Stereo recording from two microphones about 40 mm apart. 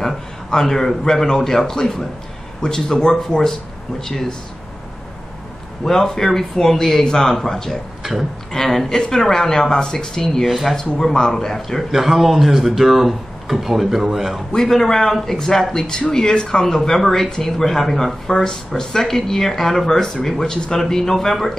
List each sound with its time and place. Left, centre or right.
0.0 s speech: centre
5.9 s speech: centre
8.0 s a sound: centre
8.5 s speech: centre
10.4 s speech: centre
10.8 s speech: centre
11.9 s speech: centre
14.5 s speech: centre